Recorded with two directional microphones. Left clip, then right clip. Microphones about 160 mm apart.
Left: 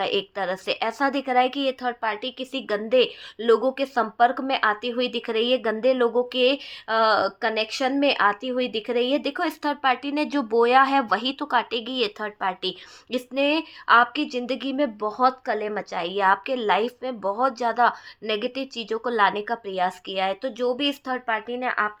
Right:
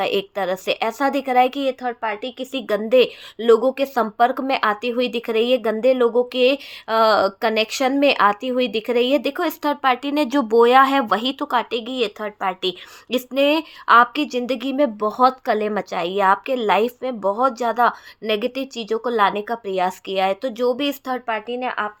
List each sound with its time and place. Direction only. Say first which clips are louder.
0.0 s a woman's voice: right 4 dB; 30° right (ahead or behind)
13.1 s a woman's voice: right 5 dB; 35° right (ahead or behind); by 21.9 s 15° right (ahead or behind)